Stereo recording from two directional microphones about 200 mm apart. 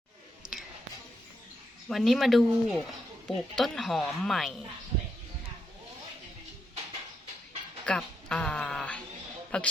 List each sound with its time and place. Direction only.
0.5 s a sound: 5° right (ahead or behind)
1.9 s speech: centre (ahead or behind)
7.9 s speech: 5° left (ahead or behind)